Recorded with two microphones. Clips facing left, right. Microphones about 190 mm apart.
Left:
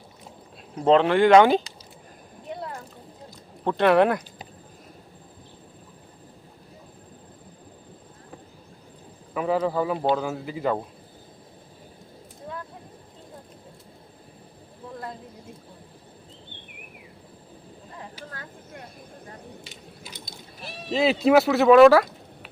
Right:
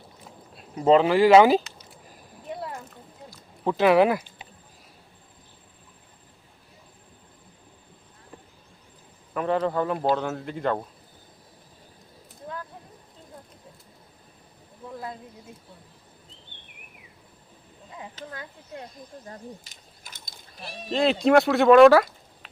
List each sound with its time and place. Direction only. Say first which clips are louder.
0.8 s speech: even; 5° right (ahead or behind)
2.4 s boat: even; centre (ahead or behind)
3.6 s speech: even; 5° right (ahead or behind)
9.3 s speech: left 1 dB; 5° left (ahead or behind)
18.2 s a sound: right 2 dB; 10° left (ahead or behind)
19.6 s mechanisms: left 8 dB; 45° right (ahead or behind)
20.6 s speech: left 1 dB; centre (ahead or behind)